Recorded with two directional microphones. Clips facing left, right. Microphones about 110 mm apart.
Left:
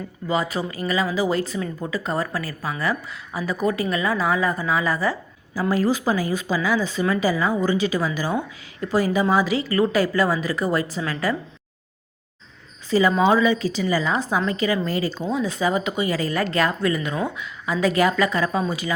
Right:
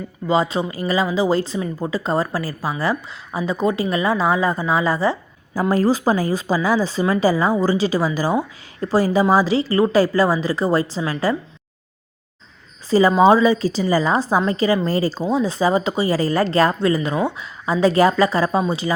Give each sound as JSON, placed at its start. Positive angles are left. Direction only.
{"t": 0.3, "sound": "speech", "side_deg": -25}
{"t": 5.5, "sound": "a woman's voice", "side_deg": -40}
{"t": 12.9, "sound": "a woman's voice", "side_deg": -35}